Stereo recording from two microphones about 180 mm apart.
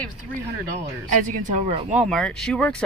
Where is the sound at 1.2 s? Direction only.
45° right (ahead or behind).